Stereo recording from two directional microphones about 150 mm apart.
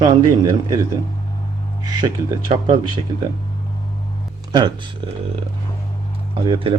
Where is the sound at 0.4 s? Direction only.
25° right (ahead or behind).